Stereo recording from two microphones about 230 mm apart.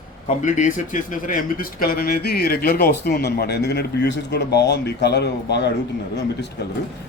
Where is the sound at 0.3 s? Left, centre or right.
Left.